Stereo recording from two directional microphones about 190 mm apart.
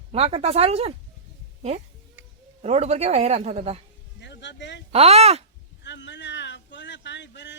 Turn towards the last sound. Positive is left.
turn(degrees=65)  # may be behind; listen again after turning